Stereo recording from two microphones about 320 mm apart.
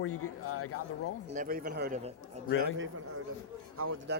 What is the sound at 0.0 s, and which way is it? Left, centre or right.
Speech, left.